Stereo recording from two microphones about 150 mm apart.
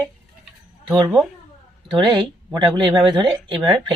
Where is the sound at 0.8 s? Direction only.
30° right (ahead or behind).